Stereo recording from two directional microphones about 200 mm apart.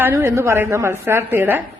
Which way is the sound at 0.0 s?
10° right (ahead or behind).